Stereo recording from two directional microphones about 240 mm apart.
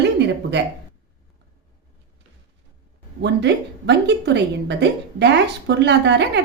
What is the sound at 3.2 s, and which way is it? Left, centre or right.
A woman's voice, right.